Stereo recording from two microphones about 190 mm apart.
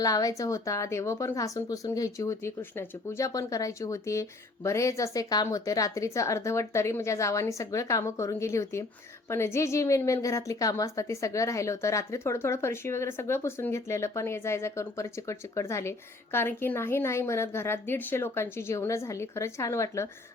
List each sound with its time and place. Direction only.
0.0 s a woman's voice: 20° left (ahead or behind)